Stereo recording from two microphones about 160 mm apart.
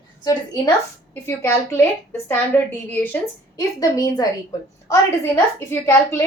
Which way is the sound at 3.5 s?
20° left (ahead or behind).